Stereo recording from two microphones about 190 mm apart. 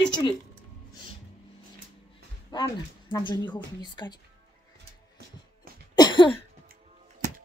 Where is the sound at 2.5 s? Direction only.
25° left (ahead or behind).